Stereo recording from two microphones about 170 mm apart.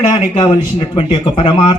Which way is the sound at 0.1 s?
30° left (ahead or behind).